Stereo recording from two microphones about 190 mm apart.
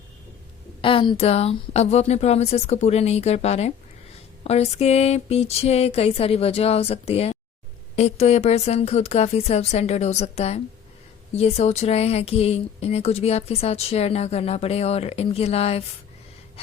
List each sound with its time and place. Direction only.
0.8 s speech: 25° left (ahead or behind)